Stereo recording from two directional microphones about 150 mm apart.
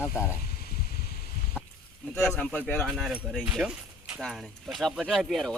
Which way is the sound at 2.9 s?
Centre (ahead or behind).